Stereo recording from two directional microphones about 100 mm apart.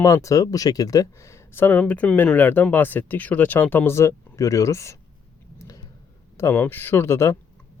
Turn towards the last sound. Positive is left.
turn(degrees=25)  # may be behind; listen again after turning